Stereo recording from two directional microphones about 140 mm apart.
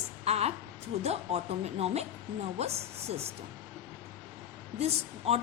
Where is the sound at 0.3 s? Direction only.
50° right (ahead or behind).